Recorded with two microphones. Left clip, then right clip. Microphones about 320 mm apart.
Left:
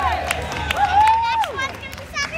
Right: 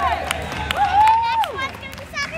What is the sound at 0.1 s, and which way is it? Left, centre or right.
Crowd, right.